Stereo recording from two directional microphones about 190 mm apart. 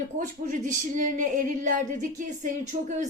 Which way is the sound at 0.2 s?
45° right (ahead or behind).